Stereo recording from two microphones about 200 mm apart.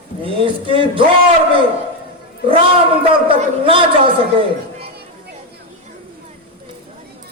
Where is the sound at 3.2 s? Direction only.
25° right (ahead or behind).